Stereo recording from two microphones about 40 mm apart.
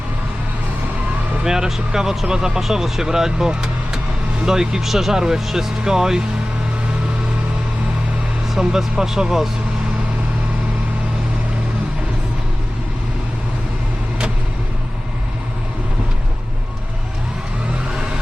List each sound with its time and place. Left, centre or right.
1.5 s speech: centre
3.5 s vehicle: centre
4.4 s speech: centre
8.5 s speech: centre